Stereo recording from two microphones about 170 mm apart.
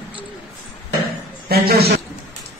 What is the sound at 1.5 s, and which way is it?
Speech, 65° right (ahead or behind).